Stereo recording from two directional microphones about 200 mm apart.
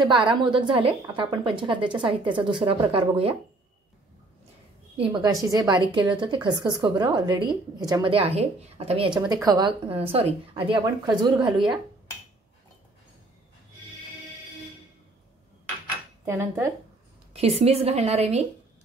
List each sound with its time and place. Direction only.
0.0 s a woman's voice: 25° right (ahead or behind)
4.9 s a woman's voice: 25° right (ahead or behind)
16.3 s speech: 15° right (ahead or behind)
17.3 s a woman's voice: 30° right (ahead or behind)